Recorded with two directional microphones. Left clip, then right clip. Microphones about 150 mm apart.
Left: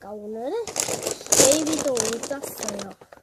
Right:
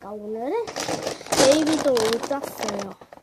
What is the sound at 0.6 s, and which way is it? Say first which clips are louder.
Speech: even; 40° left (ahead or behind).